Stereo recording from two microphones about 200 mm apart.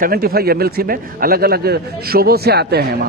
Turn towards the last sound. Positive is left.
turn(degrees=-55)  # may be behind; listen again after turning